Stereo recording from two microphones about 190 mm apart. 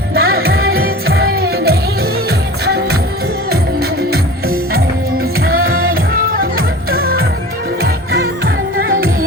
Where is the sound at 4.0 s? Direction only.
55° right (ahead or behind).